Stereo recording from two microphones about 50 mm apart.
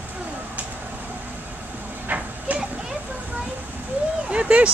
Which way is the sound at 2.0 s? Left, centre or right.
Right.